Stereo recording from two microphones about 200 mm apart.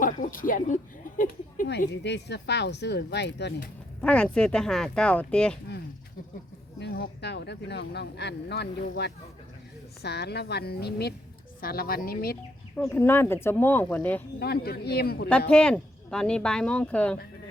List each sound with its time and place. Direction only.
0.0 s speech: 40° left (ahead or behind)
2.0 s speech: 60° left (ahead or behind)
4.0 s speech: 5° left (ahead or behind)
6.7 s a woman's voice: 55° left (ahead or behind)
12.7 s speech: 10° left (ahead or behind)
14.3 s a woman's voice: 50° left (ahead or behind)
15.3 s speech: 5° left (ahead or behind)